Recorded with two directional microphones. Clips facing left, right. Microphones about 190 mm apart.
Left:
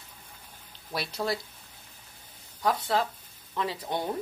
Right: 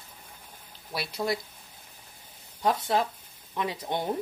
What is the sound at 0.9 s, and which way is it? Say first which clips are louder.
Speech: right 1 dB; 10° right (ahead or behind).